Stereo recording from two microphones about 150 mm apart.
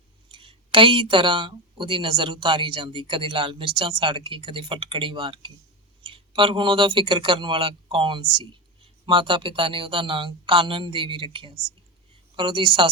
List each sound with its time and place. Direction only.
0.3 s a woman's voice: 35° right (ahead or behind)